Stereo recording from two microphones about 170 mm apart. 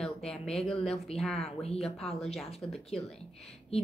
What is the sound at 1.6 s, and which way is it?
Speech, 35° left (ahead or behind).